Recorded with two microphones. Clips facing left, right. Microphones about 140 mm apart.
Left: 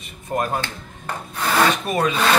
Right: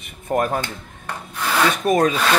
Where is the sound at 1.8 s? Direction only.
45° right (ahead or behind).